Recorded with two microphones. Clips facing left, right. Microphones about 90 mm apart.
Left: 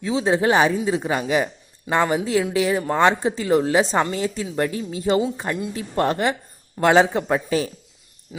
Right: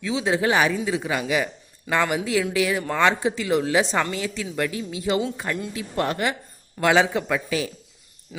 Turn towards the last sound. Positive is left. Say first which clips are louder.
# left 4 dB
turn(degrees=35)  # may be behind; listen again after turning